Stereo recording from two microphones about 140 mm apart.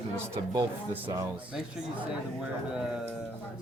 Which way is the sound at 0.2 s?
15° right (ahead or behind).